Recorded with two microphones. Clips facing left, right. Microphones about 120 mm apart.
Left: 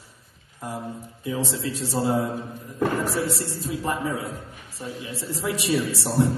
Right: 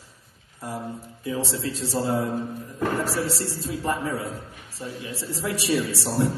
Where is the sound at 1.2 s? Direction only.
15° left (ahead or behind).